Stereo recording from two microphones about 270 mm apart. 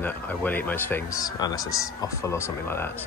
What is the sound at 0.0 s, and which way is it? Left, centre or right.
Speech, centre.